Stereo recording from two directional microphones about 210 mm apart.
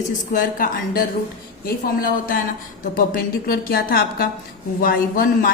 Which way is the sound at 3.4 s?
45° left (ahead or behind).